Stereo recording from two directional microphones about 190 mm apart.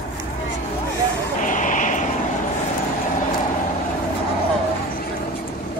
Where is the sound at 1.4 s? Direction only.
45° left (ahead or behind).